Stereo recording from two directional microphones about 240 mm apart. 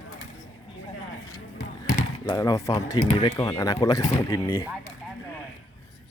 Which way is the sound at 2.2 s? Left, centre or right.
Centre.